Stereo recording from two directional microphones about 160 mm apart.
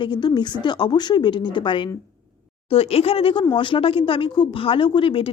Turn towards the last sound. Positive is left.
turn(degrees=35)  # may be behind; listen again after turning